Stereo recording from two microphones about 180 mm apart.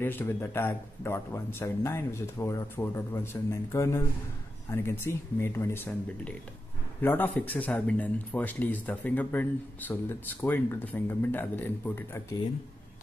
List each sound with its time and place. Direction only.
0.0 s speech: 10° left (ahead or behind)